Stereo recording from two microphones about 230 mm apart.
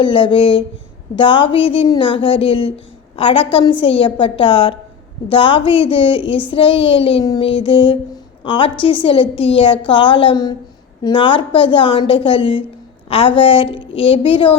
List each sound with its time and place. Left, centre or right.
0.0 s a woman's voice: left